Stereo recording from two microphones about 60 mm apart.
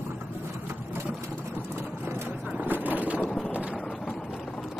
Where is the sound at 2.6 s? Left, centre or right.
Right.